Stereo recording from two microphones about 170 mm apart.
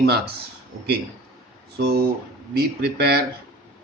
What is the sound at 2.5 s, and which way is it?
Speech, 65° right (ahead or behind).